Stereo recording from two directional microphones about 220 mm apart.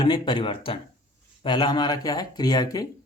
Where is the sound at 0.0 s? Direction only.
20° left (ahead or behind).